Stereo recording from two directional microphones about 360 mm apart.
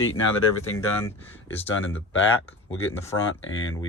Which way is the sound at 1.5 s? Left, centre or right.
Centre.